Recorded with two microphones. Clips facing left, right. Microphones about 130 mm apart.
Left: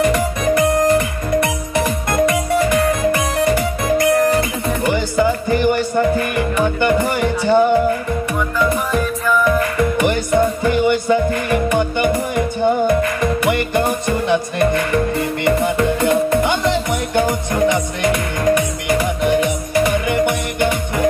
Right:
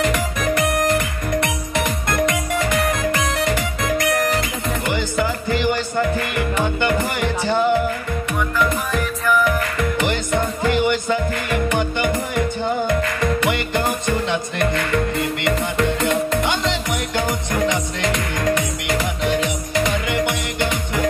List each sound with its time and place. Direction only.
0.0 s music: 25° left (ahead or behind)
2.0 s music: 25° left (ahead or behind)
8.5 s music: 25° left (ahead or behind)